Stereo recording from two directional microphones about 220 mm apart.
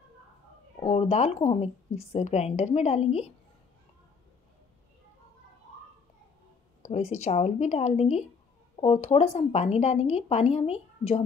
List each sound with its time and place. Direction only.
0.7 s a woman's voice: 30° left (ahead or behind)
6.9 s a woman's voice: 30° left (ahead or behind)